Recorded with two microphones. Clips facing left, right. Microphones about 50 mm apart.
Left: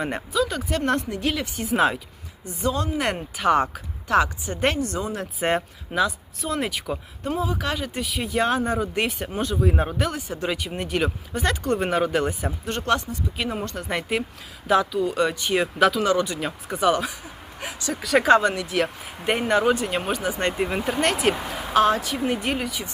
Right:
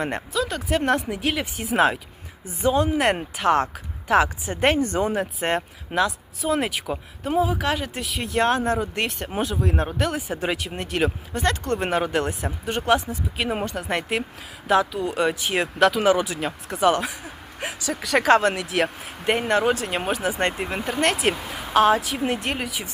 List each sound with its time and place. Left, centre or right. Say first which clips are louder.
0.0 s speech: left 1 dB; centre
2.6 s speech: right 5 dB; right
3.3 s speech: even; centre
4.8 s speech: right 4 dB; right
5.1 s speech: even; centre
10.3 s speech: right 1 dB; centre
10.6 s speech: right 1 dB; centre
12.6 s speech: right 3 dB; centre